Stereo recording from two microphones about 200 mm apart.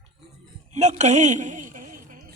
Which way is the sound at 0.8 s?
35° right (ahead or behind).